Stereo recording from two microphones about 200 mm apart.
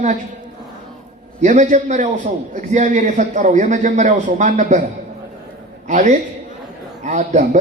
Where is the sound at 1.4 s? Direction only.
35° right (ahead or behind).